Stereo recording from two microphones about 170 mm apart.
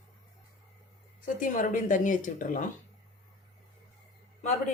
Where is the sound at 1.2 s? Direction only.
50° left (ahead or behind).